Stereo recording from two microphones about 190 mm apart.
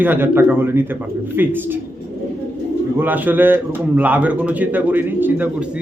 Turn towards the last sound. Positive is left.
turn(degrees=-10)  # may be behind; listen again after turning